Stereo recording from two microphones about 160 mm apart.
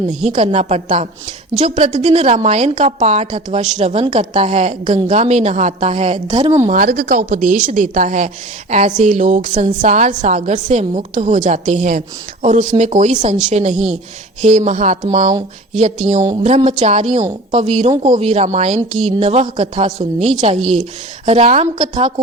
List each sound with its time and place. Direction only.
0.1 s a woman's voice: 45° right (ahead or behind); by 6.5 s 30° right (ahead or behind)
6.7 s a woman's voice: 55° right (ahead or behind); by 20.3 s 40° right (ahead or behind)
20.6 s a woman's voice: centre (ahead or behind)
21.2 s a woman's voice: 40° right (ahead or behind)
21.8 s a woman's voice: 30° right (ahead or behind)